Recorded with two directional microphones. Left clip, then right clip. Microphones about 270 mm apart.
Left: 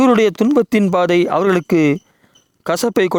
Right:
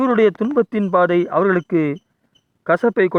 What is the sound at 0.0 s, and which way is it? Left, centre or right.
Speech, left.